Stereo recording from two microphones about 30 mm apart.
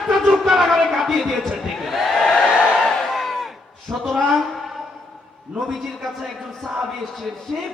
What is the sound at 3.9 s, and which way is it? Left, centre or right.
Speech, right.